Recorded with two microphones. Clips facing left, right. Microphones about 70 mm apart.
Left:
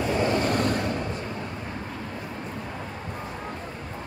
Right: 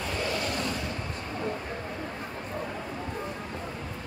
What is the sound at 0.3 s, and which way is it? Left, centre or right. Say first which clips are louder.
Vehicle: left 7 dB; left.